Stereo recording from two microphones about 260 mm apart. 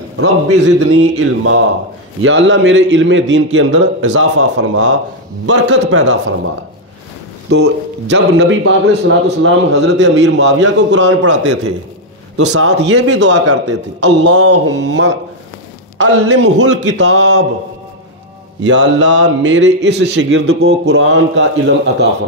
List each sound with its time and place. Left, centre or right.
0.2 s a man's voice: right
7.5 s a man's voice: right
11.2 s a man's voice: right
18.6 s a man's voice: right